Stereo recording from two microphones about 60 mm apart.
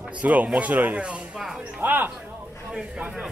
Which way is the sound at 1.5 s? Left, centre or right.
Right.